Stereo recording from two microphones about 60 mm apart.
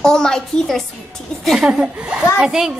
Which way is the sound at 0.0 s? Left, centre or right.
Centre.